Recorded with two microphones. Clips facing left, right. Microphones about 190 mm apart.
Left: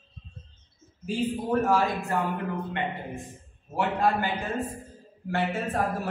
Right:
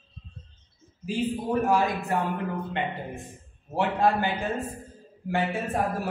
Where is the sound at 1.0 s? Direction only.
10° right (ahead or behind).